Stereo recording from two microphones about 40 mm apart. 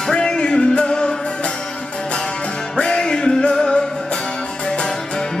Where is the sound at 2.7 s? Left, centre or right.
Left.